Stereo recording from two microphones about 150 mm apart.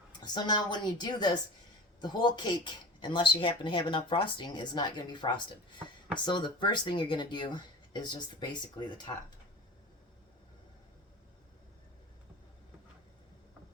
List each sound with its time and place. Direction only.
0.1 s a woman's voice: 30° left (ahead or behind)